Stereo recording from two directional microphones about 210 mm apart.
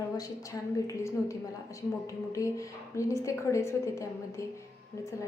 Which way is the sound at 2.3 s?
15° left (ahead or behind).